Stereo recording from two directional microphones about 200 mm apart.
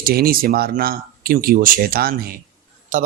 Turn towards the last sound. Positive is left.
turn(degrees=-40)  # may be behind; listen again after turning